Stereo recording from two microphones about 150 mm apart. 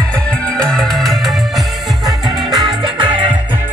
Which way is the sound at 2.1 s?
25° right (ahead or behind).